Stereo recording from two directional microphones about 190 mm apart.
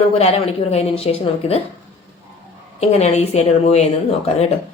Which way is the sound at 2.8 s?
35° left (ahead or behind).